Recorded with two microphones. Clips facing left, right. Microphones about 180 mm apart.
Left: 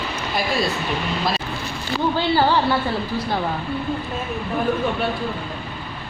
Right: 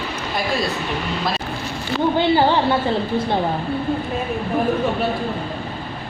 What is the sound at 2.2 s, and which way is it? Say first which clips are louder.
Speech: right 2 dB; 20° right (ahead or behind).